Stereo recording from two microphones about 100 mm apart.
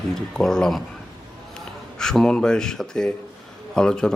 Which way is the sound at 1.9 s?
5° left (ahead or behind).